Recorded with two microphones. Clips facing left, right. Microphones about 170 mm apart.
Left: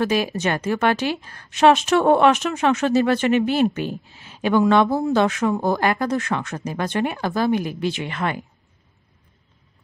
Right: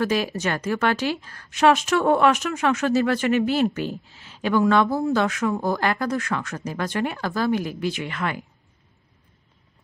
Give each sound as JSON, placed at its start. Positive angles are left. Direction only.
{"t": 0.0, "sound": "a woman's voice", "side_deg": 20}